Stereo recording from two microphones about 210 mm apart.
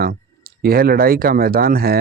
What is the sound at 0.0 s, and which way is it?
Speech, 45° right (ahead or behind).